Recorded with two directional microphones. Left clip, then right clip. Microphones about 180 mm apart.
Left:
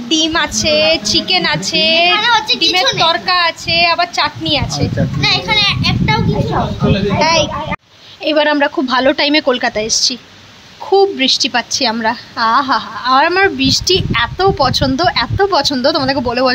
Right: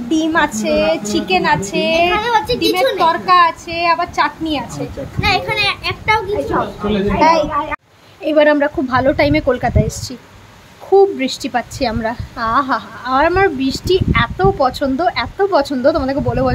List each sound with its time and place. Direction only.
0.1 s a woman's voice: 5° right (ahead or behind)
2.1 s speech: 35° right (ahead or behind)
3.0 s a woman's voice: centre (ahead or behind)
5.2 s children playing: 60° right (ahead or behind)
7.2 s a woman's voice: 10° right (ahead or behind)